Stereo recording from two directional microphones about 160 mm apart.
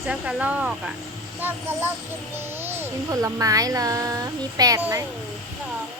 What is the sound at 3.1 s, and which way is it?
A child's voice, 20° right (ahead or behind).